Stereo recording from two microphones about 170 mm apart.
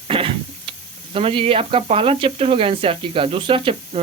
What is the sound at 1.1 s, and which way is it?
Speech, 30° right (ahead or behind).